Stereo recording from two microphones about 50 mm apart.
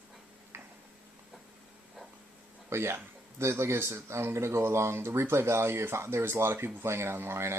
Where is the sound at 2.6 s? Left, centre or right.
Right.